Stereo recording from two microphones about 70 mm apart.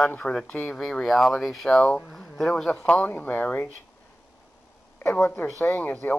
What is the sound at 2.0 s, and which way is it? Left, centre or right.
Speech, centre.